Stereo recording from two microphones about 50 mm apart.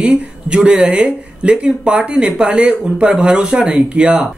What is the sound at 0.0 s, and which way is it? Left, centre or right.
Speech, centre.